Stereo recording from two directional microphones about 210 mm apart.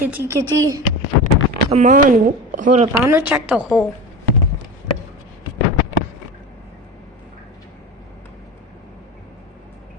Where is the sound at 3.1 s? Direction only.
10° right (ahead or behind).